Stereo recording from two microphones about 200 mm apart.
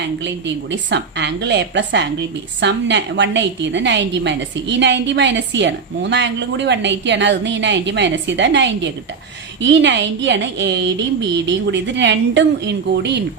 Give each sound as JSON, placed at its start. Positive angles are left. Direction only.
{"t": 0.3, "sound": "a woman's voice", "side_deg": -60}